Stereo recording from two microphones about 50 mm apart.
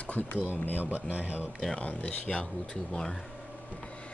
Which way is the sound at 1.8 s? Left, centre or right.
Left.